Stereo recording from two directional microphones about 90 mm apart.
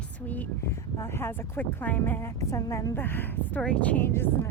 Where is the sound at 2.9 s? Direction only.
25° left (ahead or behind).